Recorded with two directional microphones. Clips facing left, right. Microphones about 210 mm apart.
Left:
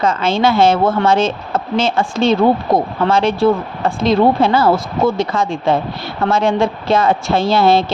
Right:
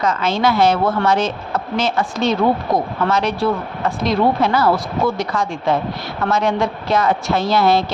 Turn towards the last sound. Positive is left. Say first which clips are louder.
# left 3 dB
turn(degrees=25)  # may be behind; listen again after turning